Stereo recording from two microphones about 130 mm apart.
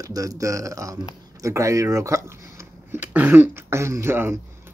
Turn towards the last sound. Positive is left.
turn(degrees=-20)  # may be behind; listen again after turning